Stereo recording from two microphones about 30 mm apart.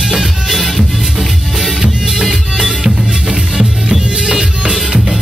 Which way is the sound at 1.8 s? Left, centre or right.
Centre.